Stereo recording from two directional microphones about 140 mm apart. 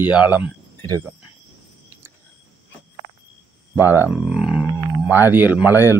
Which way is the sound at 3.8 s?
15° right (ahead or behind).